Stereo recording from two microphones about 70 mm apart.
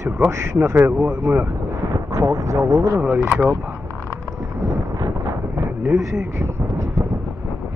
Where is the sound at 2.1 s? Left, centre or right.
Right.